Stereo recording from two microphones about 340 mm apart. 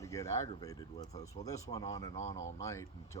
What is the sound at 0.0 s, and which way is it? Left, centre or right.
Speech, centre.